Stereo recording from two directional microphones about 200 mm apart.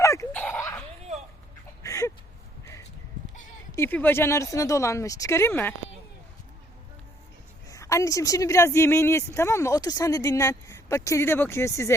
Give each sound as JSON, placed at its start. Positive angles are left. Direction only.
{"t": 0.0, "sound": "dog", "side_deg": 15}
{"t": 1.8, "sound": "a sound", "side_deg": 15}
{"t": 3.7, "sound": "a woman's voice", "side_deg": 10}
{"t": 7.7, "sound": "a woman's voice", "side_deg": 15}